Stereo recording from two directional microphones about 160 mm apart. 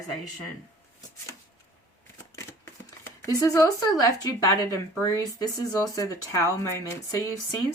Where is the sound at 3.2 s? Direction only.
20° left (ahead or behind).